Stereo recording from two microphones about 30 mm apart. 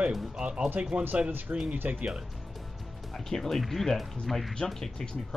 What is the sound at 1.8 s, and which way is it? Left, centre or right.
Speech, right.